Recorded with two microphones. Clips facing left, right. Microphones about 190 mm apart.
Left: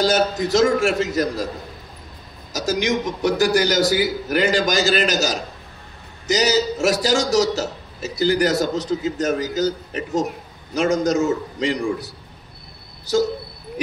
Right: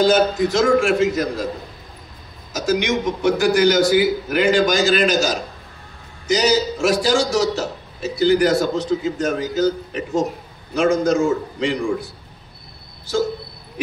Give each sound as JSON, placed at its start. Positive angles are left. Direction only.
{"t": 0.0, "sound": "a man's voice", "side_deg": 40}
{"t": 2.5, "sound": "a man's voice", "side_deg": 40}
{"t": 10.7, "sound": "a man's voice", "side_deg": 40}